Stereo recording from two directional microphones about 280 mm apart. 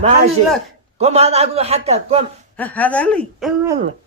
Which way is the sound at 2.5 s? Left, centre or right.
Centre.